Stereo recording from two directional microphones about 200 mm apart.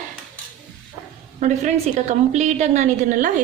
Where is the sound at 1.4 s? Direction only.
35° right (ahead or behind).